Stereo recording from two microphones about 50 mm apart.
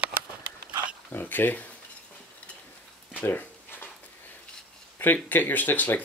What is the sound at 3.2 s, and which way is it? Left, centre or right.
Dog, left.